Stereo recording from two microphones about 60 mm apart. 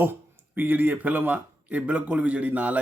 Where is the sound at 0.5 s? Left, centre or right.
Right.